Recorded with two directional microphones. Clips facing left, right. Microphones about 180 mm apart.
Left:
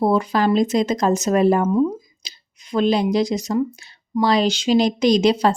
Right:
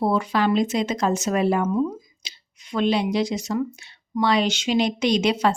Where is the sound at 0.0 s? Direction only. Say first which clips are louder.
Left 3 dB; 40° left (ahead or behind).